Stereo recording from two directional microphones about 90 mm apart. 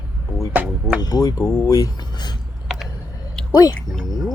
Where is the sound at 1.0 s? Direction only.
45° left (ahead or behind).